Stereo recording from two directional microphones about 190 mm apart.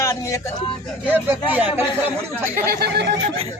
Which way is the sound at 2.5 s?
50° right (ahead or behind).